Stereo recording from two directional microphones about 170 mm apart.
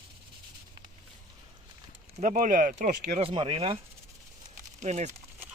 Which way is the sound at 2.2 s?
50° right (ahead or behind).